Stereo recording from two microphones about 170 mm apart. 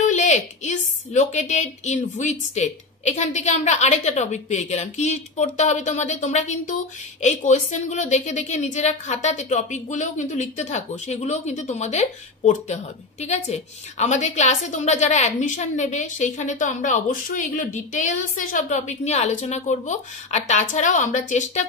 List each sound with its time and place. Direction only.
0.0 s a woman's voice: 45° left (ahead or behind)